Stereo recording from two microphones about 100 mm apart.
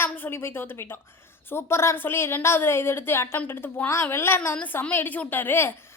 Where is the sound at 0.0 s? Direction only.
25° left (ahead or behind).